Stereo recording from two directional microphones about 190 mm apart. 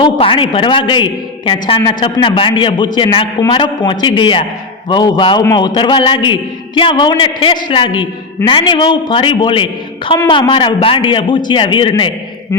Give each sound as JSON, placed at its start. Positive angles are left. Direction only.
{"t": 0.0, "sound": "a man's voice", "side_deg": 25}